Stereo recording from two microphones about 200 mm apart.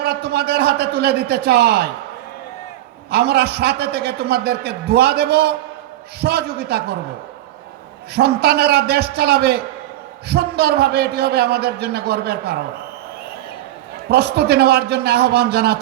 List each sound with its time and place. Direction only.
0.0 s a man's voice: 55° right (ahead or behind)
3.1 s a man's voice: 55° right (ahead or behind)
8.1 s a man's voice: 55° right (ahead or behind)
14.1 s a man's voice: 55° right (ahead or behind)